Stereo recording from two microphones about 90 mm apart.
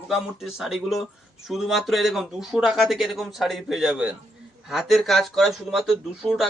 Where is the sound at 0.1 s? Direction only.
5° right (ahead or behind).